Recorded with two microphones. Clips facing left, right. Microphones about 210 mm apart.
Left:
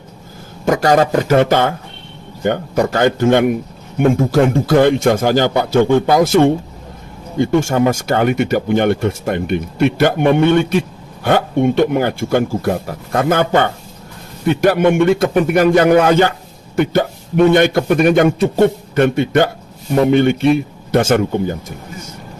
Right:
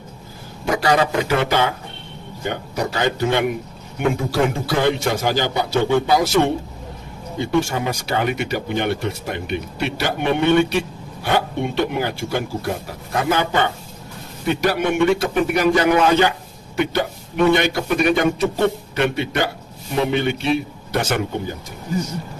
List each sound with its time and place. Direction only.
0.6 s speech: 45° left (ahead or behind)